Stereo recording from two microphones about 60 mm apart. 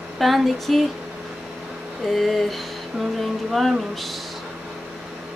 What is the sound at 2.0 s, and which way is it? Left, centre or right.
A woman's voice, centre.